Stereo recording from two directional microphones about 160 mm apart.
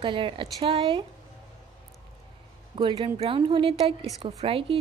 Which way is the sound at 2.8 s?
35° right (ahead or behind).